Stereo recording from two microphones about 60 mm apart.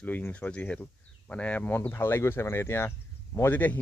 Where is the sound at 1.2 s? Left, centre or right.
Left.